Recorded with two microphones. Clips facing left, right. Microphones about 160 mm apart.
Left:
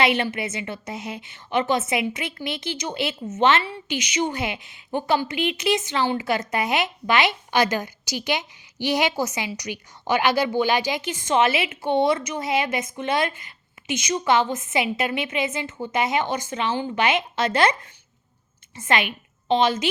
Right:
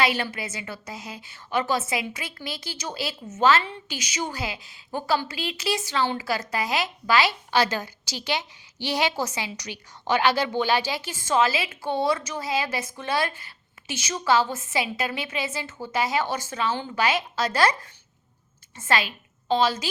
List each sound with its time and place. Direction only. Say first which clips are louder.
0.0 s a woman's voice: left 3 dB; 20° left (ahead or behind)
18.8 s a woman's voice: left 2 dB; 20° left (ahead or behind)